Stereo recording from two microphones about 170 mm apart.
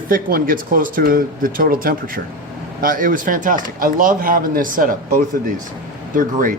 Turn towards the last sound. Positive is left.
turn(degrees=-50)  # may be behind; listen again after turning